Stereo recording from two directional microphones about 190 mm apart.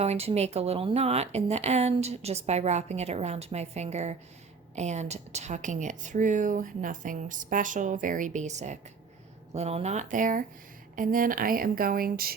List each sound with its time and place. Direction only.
0.0 s speech: 35° right (ahead or behind); by 12.3 s 50° right (ahead or behind)